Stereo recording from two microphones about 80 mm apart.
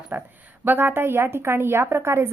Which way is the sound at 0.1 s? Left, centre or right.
Right.